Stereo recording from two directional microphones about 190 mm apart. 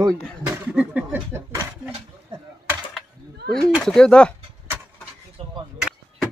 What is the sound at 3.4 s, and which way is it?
Speech, centre (ahead or behind).